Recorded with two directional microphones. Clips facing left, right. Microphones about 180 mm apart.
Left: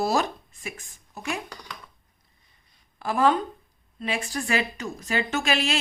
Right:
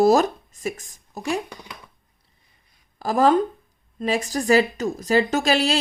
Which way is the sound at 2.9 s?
40° right (ahead or behind).